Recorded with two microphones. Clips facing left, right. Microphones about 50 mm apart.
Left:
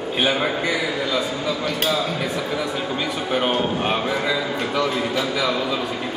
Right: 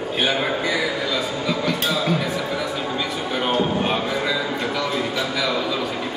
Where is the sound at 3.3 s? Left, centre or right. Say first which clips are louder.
Even; centre.